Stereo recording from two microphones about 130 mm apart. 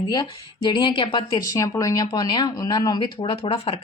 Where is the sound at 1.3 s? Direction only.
25° left (ahead or behind).